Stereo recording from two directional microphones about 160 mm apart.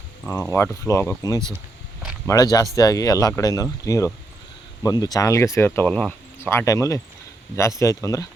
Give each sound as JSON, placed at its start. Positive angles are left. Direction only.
{"t": 0.3, "sound": "speech", "side_deg": 15}